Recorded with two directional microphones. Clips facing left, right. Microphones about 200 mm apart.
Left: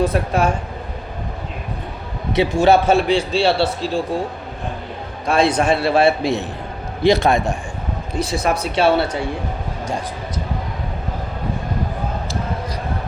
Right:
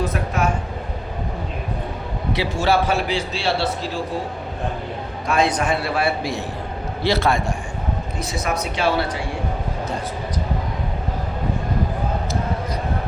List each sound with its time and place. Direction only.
0.0 s speech: 30° left (ahead or behind)
2.3 s a man's voice: 20° left (ahead or behind)
5.3 s a man's voice: 30° left (ahead or behind)
8.2 s a man's voice: 30° left (ahead or behind)